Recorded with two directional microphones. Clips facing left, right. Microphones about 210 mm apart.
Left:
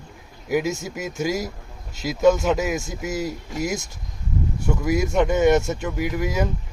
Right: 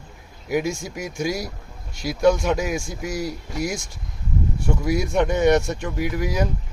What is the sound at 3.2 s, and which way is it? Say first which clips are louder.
Speech: even; 45° left (ahead or behind).